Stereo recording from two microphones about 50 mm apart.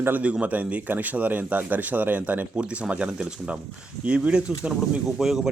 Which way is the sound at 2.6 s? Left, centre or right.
Right.